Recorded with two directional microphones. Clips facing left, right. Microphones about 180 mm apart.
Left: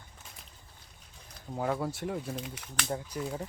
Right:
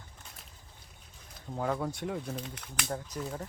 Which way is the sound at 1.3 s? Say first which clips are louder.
Left 1 dB; centre (ahead or behind).